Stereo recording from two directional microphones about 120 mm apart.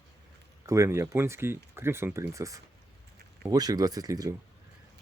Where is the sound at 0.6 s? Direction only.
25° right (ahead or behind).